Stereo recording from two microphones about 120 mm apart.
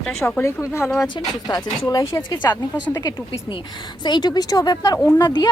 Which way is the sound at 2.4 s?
15° left (ahead or behind).